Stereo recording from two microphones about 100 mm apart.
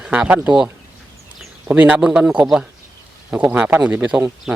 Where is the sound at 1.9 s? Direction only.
10° right (ahead or behind).